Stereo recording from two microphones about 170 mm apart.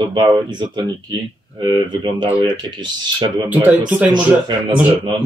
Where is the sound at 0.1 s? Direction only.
25° right (ahead or behind).